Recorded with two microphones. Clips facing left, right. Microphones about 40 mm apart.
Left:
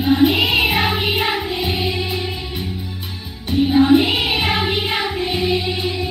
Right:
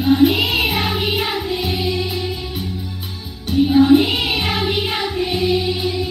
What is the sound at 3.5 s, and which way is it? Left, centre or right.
Music, centre.